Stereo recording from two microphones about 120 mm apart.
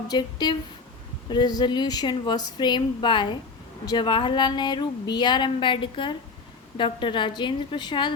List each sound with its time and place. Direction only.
0.1 s a woman's voice: 35° left (ahead or behind)